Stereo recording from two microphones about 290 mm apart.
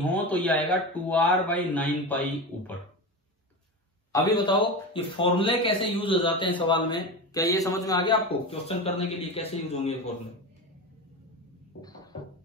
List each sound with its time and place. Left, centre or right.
0.0 s speech: centre
4.1 s a man's voice: centre
11.8 s a sound: centre